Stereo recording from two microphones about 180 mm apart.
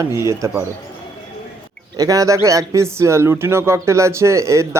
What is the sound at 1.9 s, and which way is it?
A man's voice, 20° right (ahead or behind).